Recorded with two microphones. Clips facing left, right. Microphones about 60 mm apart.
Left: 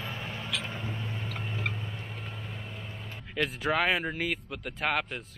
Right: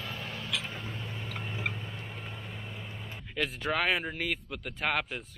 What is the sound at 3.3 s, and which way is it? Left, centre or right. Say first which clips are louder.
Speech: left 3 dB; centre.